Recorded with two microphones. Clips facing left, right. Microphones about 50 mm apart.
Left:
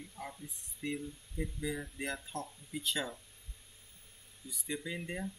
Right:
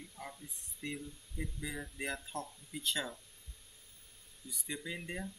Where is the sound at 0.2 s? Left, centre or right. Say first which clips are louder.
Left 3 dB; centre.